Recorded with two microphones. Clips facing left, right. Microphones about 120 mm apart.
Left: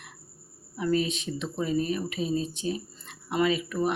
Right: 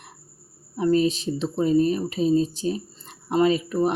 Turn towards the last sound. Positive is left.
turn(degrees=-35)  # may be behind; listen again after turning